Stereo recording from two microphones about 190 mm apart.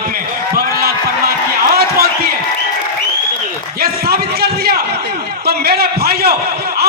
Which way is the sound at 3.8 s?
55° right (ahead or behind).